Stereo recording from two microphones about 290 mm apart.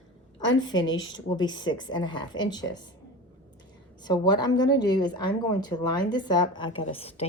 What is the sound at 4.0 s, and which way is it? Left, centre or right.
A woman's voice, centre.